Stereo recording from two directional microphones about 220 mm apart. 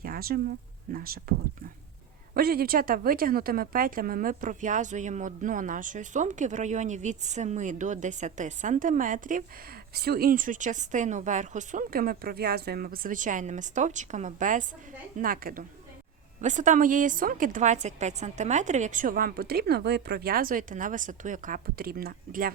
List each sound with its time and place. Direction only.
0.0 s speech: 45° right (ahead or behind)
2.3 s a woman's voice: 45° right (ahead or behind)